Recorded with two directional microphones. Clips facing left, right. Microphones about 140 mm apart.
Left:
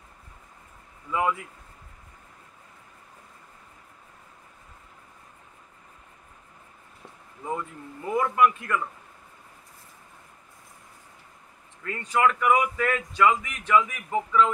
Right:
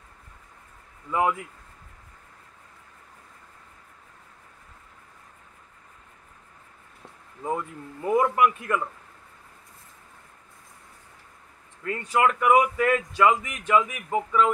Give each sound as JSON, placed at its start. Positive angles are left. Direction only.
{"t": 7.4, "sound": "speech", "side_deg": -15}
{"t": 11.8, "sound": "speech", "side_deg": -15}